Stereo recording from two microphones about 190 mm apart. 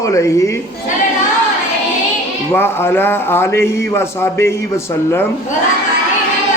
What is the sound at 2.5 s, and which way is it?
A man's voice, 10° left (ahead or behind).